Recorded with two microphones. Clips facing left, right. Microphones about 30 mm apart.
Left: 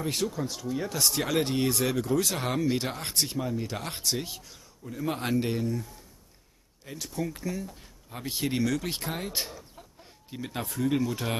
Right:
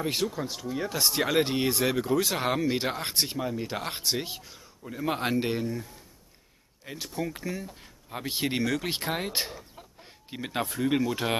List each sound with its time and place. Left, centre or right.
0.0 s speech: centre